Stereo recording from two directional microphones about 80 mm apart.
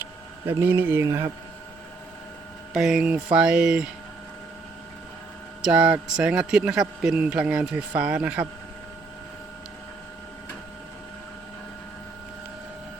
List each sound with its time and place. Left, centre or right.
0.4 s speech: right
1.0 s speech: right
2.7 s a man's voice: centre
5.6 s a man's voice: centre